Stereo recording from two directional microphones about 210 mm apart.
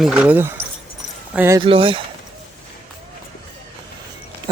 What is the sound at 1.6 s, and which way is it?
Speech, 25° right (ahead or behind).